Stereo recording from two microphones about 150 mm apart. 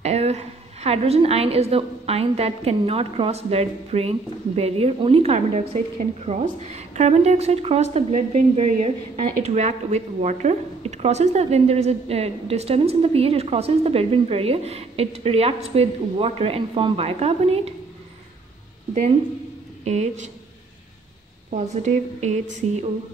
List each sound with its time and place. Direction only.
0.0 s a woman's voice: 45° right (ahead or behind)
19.8 s a woman's voice: 50° right (ahead or behind)
21.5 s a woman's voice: 50° right (ahead or behind)